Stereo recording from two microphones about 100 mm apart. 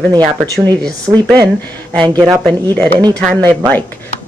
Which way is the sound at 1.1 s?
20° right (ahead or behind).